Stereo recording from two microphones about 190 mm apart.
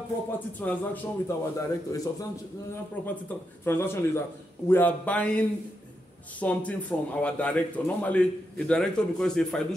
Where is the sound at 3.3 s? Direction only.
10° left (ahead or behind).